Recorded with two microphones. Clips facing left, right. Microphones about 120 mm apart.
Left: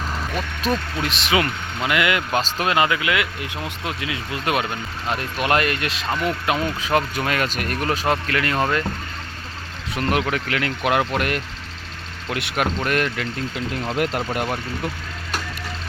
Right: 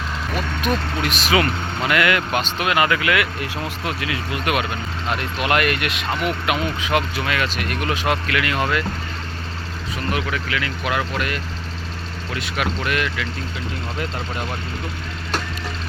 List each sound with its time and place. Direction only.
0.6 s speech: 30° left (ahead or behind)
2.4 s speech: 35° left (ahead or behind)
9.9 s speech: 60° left (ahead or behind)
12.5 s speech: 45° left (ahead or behind)
14.0 s speech: 70° left (ahead or behind)